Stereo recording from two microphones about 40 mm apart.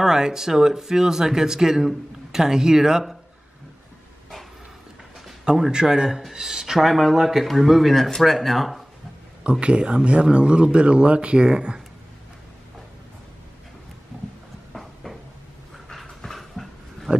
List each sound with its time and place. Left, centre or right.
0.0 s speech: centre
5.4 s speech: centre
9.4 s speech: right
14.7 s a sound: centre
15.9 s dog: centre